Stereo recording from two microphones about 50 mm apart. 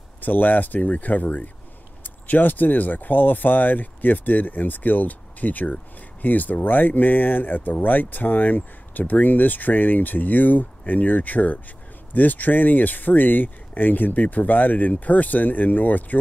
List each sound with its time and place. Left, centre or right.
0.2 s speech: left